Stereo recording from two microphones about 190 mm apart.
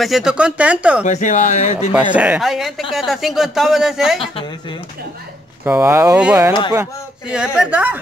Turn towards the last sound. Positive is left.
turn(degrees=-10)  # may be behind; listen again after turning